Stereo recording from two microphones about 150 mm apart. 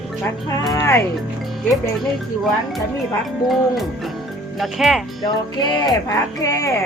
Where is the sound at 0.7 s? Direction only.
15° left (ahead or behind).